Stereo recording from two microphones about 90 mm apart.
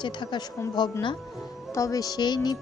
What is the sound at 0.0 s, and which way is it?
Speech, 55° left (ahead or behind).